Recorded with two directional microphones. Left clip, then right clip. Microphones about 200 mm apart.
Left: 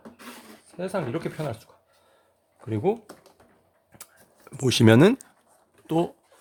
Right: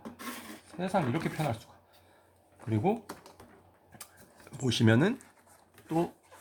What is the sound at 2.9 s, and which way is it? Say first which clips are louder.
Speech: left 6 dB; 50° left (ahead or behind).